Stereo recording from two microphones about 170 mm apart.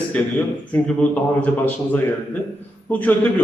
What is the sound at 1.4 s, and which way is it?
A man's voice, 10° left (ahead or behind).